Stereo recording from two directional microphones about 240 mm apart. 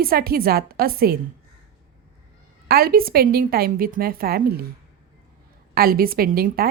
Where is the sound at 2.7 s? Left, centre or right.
Right.